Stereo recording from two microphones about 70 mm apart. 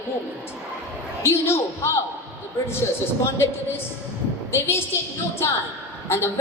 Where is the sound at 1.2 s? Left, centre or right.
Left.